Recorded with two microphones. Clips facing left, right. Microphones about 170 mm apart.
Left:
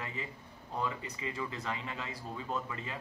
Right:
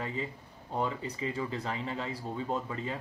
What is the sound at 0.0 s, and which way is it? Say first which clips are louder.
A man's voice: right 6 dB; 30° right (ahead or behind).